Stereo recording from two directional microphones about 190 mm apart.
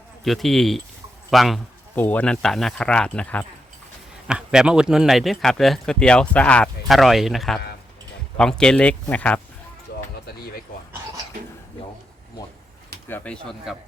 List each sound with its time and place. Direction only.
0.3 s speech: centre (ahead or behind)
4.3 s speech: 5° right (ahead or behind)
9.9 s music: 55° left (ahead or behind)
10.2 s speech: 55° left (ahead or behind)
13.1 s speech: 10° left (ahead or behind)